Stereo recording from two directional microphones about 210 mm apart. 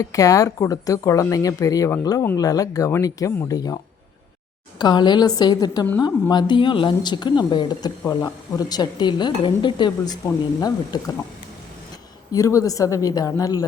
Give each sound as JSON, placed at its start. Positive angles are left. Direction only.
{"t": 0.0, "sound": "speech", "side_deg": 15}
{"t": 4.8, "sound": "speech", "side_deg": 20}
{"t": 12.3, "sound": "speech", "side_deg": 15}